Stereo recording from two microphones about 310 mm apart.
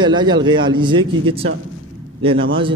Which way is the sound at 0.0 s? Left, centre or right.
Centre.